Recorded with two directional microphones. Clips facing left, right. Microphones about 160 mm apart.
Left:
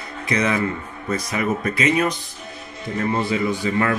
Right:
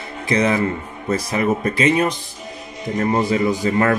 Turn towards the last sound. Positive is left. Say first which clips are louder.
# right 3 dB
turn(degrees=-40)  # may be behind; listen again after turning